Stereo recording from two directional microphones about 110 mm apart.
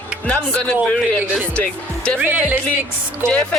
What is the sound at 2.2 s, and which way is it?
Speech, 15° right (ahead or behind).